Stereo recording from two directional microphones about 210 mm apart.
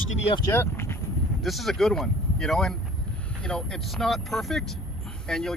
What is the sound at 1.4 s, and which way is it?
Speech, centre (ahead or behind).